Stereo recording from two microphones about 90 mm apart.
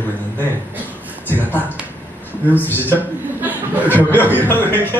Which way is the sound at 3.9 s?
25° left (ahead or behind).